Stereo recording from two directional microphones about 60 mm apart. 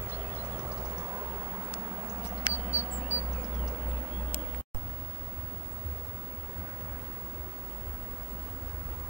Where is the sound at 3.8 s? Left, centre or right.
Right.